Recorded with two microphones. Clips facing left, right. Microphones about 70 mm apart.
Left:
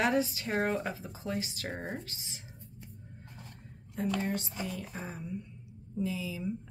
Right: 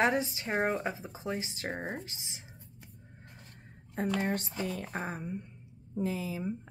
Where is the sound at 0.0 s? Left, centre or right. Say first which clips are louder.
Even; right.